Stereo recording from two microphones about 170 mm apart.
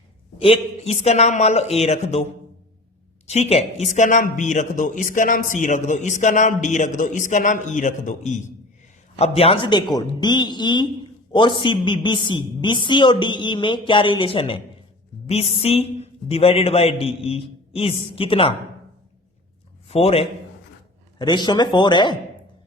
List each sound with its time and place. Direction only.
0.3 s a man's voice: 35° left (ahead or behind)
3.2 s a man's voice: 40° left (ahead or behind)
19.9 s a man's voice: 35° left (ahead or behind)
21.2 s a woman's voice: 25° left (ahead or behind)